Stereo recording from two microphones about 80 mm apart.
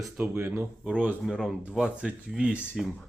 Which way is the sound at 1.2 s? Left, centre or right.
Centre.